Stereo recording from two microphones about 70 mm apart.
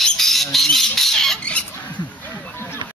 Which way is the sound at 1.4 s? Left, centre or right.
Centre.